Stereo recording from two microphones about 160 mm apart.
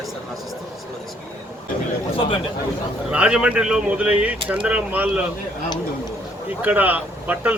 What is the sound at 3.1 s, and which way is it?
Speech, 5° right (ahead or behind).